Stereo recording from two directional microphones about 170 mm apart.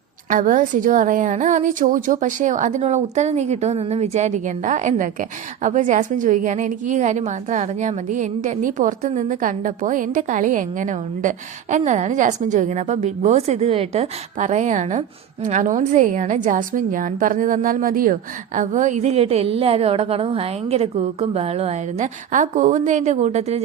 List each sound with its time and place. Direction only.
0.3 s a woman's voice: 50° right (ahead or behind)